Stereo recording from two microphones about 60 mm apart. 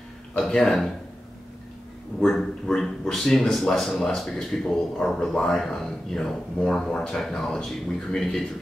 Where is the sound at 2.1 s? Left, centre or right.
Centre.